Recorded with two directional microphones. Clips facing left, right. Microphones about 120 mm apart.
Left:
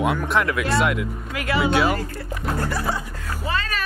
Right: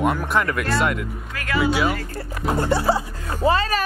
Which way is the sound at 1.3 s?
15° left (ahead or behind).